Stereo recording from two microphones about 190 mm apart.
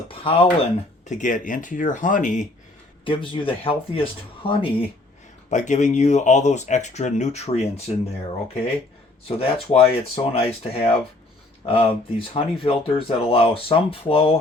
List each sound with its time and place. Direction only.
0.1 s a sound: 30° left (ahead or behind)
1.0 s speech: 40° left (ahead or behind)
3.0 s speech: 25° left (ahead or behind)
5.5 s speech: 40° left (ahead or behind)
9.4 s speech: 30° left (ahead or behind)